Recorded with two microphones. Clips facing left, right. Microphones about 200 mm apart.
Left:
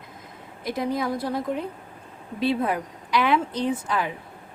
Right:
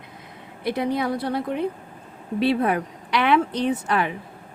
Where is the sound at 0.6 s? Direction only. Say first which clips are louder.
Right 3 dB; 65° right (ahead or behind).